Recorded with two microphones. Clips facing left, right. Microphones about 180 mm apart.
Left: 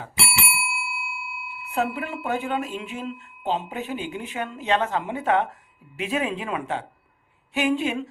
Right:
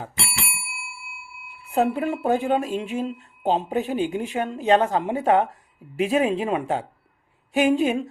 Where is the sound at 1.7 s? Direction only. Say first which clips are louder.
Right 5 dB; 40° right (ahead or behind).